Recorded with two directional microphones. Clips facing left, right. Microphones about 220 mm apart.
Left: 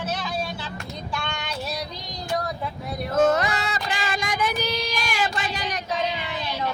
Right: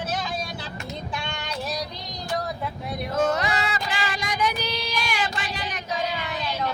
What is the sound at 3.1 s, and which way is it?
Child singing, 50° left (ahead or behind).